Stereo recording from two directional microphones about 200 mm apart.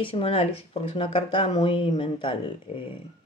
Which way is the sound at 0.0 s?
30° left (ahead or behind).